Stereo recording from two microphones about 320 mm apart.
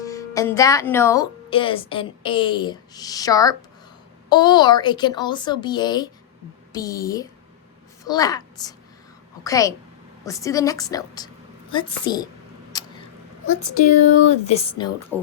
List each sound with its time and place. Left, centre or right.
0.0 s a woman's voice: centre
12.7 s a sound: centre
14.1 s speech: centre